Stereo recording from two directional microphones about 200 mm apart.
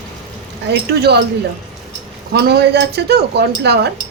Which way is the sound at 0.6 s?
55° right (ahead or behind).